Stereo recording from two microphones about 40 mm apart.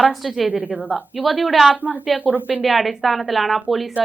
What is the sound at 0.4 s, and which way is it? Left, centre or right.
Speech, right.